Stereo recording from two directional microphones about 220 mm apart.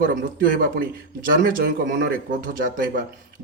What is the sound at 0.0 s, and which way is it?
A man's voice, 40° right (ahead or behind).